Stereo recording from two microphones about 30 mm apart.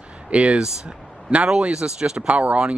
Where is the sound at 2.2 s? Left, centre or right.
Right.